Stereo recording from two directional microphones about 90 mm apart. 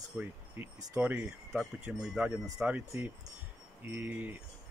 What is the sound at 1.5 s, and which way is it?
Speech, 5° right (ahead or behind).